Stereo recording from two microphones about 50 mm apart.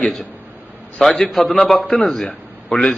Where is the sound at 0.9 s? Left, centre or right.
Centre.